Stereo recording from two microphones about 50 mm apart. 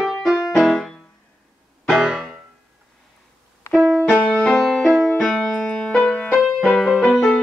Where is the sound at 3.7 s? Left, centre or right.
Centre.